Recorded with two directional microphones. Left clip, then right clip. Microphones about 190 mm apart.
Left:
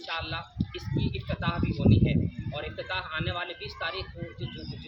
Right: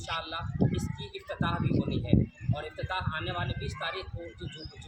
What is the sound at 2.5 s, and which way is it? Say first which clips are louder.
A man's voice: left 2 dB; 15° left (ahead or behind).